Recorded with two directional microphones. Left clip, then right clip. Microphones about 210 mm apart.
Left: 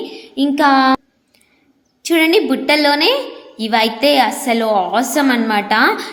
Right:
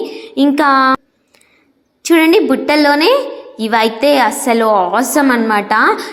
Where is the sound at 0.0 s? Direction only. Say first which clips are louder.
Right 5 dB; 15° right (ahead or behind).